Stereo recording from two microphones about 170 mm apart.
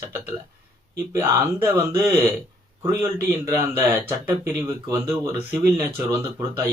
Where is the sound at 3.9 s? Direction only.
10° right (ahead or behind).